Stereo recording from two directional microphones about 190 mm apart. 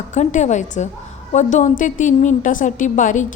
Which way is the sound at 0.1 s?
40° left (ahead or behind).